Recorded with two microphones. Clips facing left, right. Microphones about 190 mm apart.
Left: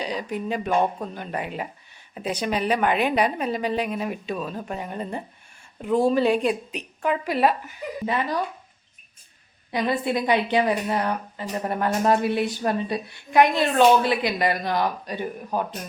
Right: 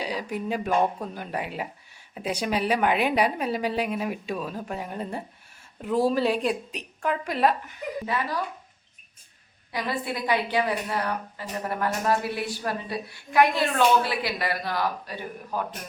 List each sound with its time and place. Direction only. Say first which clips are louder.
0.0 s a woman's voice: left 2 dB; 10° right (ahead or behind)
8.0 s a woman's voice: left 5 dB; 20° left (ahead or behind)
9.7 s a woman's voice: left 6 dB; 25° left (ahead or behind)